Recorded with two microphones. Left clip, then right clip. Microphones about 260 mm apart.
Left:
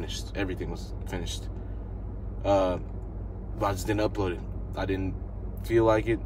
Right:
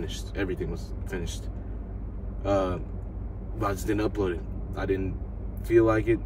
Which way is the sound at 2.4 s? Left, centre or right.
Centre.